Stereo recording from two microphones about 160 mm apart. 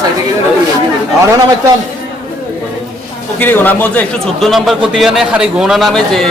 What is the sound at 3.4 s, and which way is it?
A man's voice, 10° left (ahead or behind).